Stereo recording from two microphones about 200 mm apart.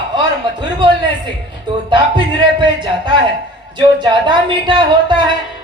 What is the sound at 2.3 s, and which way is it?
A man's voice, 25° right (ahead or behind).